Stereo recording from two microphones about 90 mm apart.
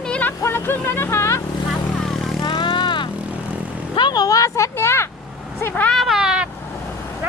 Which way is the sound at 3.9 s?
55° left (ahead or behind).